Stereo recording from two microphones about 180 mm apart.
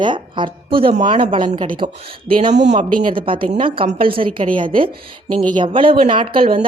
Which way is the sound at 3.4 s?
30° right (ahead or behind).